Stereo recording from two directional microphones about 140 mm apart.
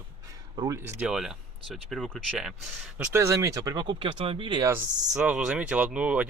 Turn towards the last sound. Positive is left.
turn(degrees=-10)  # may be behind; listen again after turning